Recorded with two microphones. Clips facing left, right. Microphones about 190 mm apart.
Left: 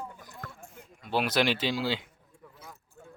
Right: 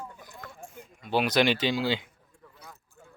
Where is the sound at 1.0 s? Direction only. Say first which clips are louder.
Right 3 dB; centre (ahead or behind).